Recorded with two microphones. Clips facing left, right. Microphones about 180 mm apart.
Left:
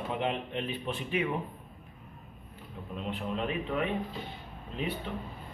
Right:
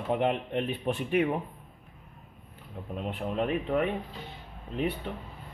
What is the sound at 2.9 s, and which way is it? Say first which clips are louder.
Speech: right 3 dB; 50° right (ahead or behind).